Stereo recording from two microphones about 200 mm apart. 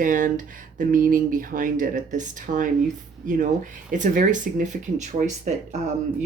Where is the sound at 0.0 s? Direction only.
40° right (ahead or behind).